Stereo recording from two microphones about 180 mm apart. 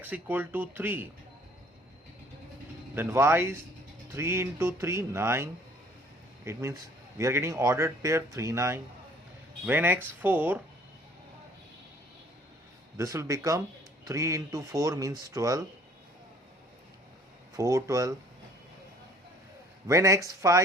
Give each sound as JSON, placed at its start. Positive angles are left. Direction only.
{"t": 0.0, "sound": "speech", "side_deg": -10}
{"t": 2.9, "sound": "speech", "side_deg": -10}
{"t": 13.0, "sound": "speech", "side_deg": -20}
{"t": 17.6, "sound": "speech", "side_deg": -15}
{"t": 19.9, "sound": "speech", "side_deg": -15}